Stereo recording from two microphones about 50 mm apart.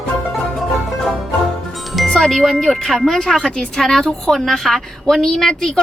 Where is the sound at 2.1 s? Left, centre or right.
Centre.